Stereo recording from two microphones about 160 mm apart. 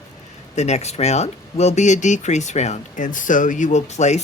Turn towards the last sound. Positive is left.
turn(degrees=45)  # may be behind; listen again after turning